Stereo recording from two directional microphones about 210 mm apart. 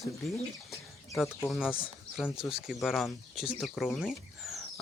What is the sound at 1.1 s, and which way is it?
Speech, centre (ahead or behind).